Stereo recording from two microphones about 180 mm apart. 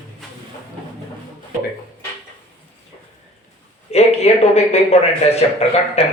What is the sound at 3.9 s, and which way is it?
Speech, 35° left (ahead or behind).